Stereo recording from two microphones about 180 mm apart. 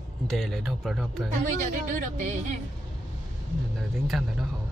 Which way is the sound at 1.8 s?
45° right (ahead or behind).